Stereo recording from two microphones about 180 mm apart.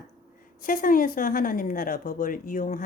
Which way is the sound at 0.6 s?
50° left (ahead or behind).